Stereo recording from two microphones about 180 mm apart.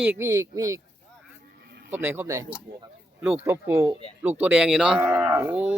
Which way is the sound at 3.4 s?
15° right (ahead or behind).